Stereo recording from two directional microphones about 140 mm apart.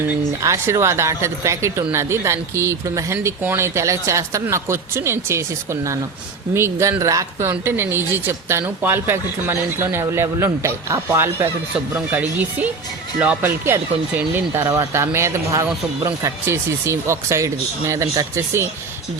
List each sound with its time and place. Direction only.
0.4 s a woman's voice: 20° right (ahead or behind)